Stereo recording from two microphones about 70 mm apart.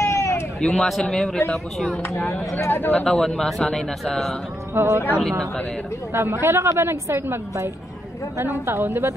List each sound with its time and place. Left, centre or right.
0.0 s a sound: left
0.6 s a man's voice: centre
2.0 s speech: left
3.1 s speech: centre
4.7 s a woman's voice: right
6.1 s a woman's voice: right